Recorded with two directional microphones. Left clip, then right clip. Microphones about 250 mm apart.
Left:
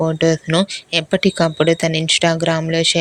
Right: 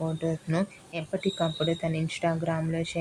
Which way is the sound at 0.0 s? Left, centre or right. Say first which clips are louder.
Left 15 dB; left.